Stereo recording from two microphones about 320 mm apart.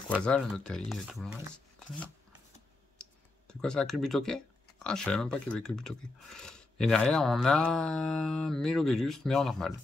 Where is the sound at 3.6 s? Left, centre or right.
Centre.